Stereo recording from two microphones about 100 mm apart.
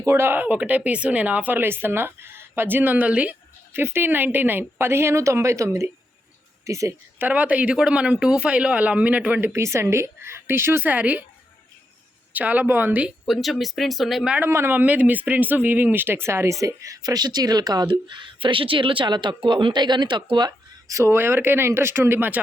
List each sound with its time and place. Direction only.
0.0 s a woman's voice: 25° right (ahead or behind)
7.2 s a woman's voice: 15° right (ahead or behind)
9.5 s speech: 30° right (ahead or behind)
12.3 s a woman's voice: 15° right (ahead or behind)
13.2 s speech: centre (ahead or behind)
14.3 s speech: 25° right (ahead or behind); by 20.5 s 50° right (ahead or behind)
20.8 s speech: 30° right (ahead or behind)